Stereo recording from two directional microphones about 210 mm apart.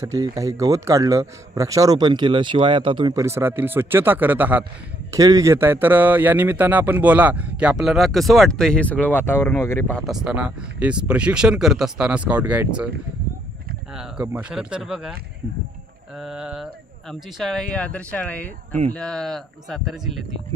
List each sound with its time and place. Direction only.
0.0 s a man's voice: 15° right (ahead or behind)
13.9 s a man's voice: 5° right (ahead or behind)
16.2 s a man's voice: 5° right (ahead or behind)